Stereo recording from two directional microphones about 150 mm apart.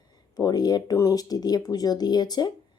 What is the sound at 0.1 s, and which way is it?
Speech, 25° left (ahead or behind).